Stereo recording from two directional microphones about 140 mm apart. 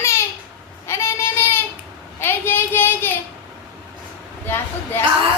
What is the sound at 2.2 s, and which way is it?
Child singing, 15° left (ahead or behind).